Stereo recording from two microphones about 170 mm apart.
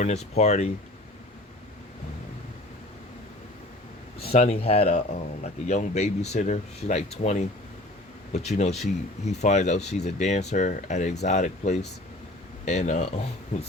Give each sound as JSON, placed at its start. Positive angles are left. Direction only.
{"t": 0.0, "sound": "speech", "side_deg": 40}
{"t": 4.3, "sound": "speech", "side_deg": 35}